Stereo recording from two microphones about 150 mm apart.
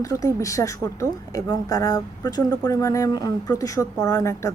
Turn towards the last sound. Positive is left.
turn(degrees=20)  # may be behind; listen again after turning